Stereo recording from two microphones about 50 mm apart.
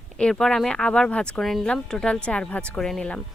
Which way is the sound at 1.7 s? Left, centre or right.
Centre.